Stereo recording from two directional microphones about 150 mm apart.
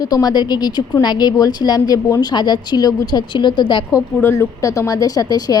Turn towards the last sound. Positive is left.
turn(degrees=25)  # may be behind; listen again after turning